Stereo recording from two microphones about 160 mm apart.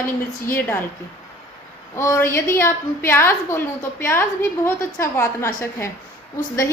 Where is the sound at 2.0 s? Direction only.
15° left (ahead or behind).